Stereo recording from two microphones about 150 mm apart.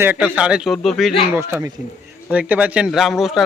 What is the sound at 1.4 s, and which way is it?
Speech, 15° right (ahead or behind).